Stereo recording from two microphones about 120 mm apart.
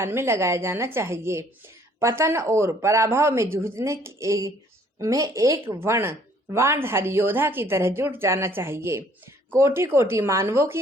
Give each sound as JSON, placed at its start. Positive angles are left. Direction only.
{"t": 0.0, "sound": "speech", "side_deg": -20}